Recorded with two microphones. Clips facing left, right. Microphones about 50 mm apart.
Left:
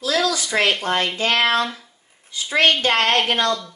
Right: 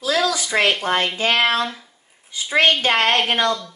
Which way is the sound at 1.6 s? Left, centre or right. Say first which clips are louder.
Left 1 dB; centre.